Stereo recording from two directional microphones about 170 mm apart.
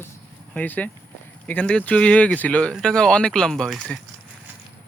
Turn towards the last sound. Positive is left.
turn(degrees=5)  # may be behind; listen again after turning